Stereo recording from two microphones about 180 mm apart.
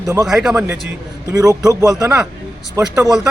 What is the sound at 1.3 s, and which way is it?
A man's voice, 20° right (ahead or behind).